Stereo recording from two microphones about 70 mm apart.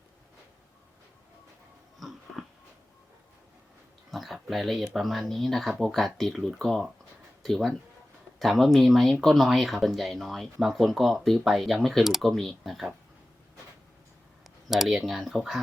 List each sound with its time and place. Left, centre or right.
2.0 s dog: centre
4.1 s speech: centre
14.7 s speech: centre